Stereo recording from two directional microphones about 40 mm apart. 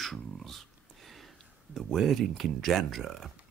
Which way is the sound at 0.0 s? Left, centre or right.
Centre.